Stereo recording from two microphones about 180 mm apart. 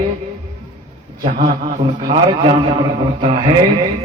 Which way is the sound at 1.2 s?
50° right (ahead or behind).